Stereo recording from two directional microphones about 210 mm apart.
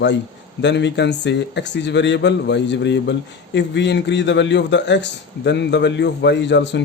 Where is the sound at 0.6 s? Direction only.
55° left (ahead or behind).